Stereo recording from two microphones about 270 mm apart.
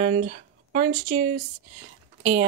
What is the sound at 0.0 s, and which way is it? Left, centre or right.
Speech, right.